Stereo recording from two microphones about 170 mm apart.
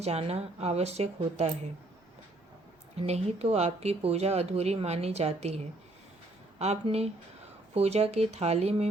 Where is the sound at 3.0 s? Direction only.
35° right (ahead or behind).